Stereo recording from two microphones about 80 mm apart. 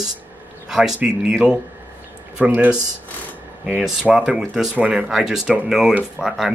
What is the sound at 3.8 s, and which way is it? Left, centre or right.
Speech, centre.